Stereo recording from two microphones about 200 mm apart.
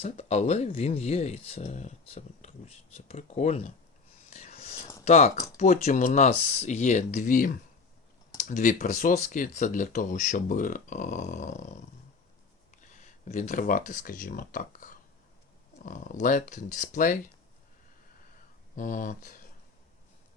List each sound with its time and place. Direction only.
0.0 s speech: 30° left (ahead or behind)
4.3 s whispering: 35° left (ahead or behind)
5.0 s speech: 30° left (ahead or behind)
18.8 s speech: 40° left (ahead or behind)